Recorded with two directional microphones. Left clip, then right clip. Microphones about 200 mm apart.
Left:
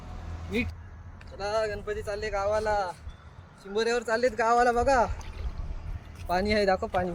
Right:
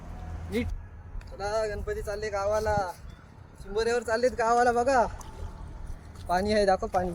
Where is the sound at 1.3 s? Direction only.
5° right (ahead or behind).